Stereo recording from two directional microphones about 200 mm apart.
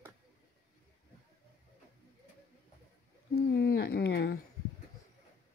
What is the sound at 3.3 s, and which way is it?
Speech, 50° left (ahead or behind).